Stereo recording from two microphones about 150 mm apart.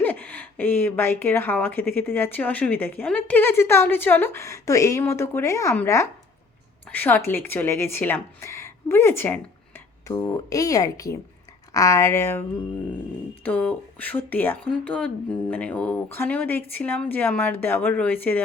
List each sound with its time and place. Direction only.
0.0 s speech: 10° left (ahead or behind)